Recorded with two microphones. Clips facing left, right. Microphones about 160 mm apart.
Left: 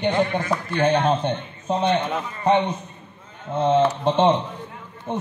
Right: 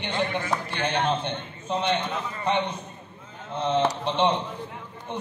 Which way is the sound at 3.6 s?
45° left (ahead or behind).